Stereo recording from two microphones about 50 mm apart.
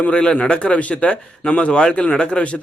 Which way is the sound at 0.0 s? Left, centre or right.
Left.